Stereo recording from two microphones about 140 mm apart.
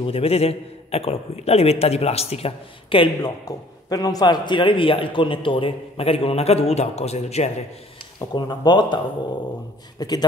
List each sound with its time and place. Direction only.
0.0 s a man's voice: 45° left (ahead or behind)
3.4 s a man's voice: 25° left (ahead or behind); by 7.5 s 50° left (ahead or behind)
8.2 s a man's voice: 30° left (ahead or behind)